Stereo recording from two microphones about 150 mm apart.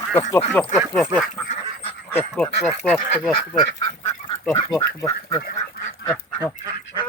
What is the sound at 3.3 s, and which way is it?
Speech, 30° left (ahead or behind).